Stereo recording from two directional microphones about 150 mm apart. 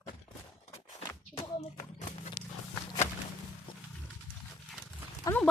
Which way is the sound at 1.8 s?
55° left (ahead or behind).